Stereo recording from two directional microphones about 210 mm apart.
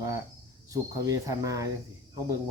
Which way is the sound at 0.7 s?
15° right (ahead or behind).